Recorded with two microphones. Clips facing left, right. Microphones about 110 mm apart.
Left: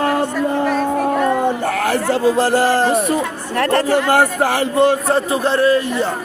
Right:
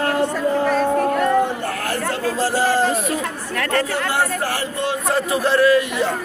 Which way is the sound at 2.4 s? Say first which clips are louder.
Left 4 dB; 60° left (ahead or behind).